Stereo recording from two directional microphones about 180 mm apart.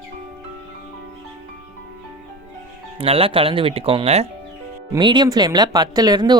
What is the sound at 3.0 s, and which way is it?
Speech, 30° right (ahead or behind).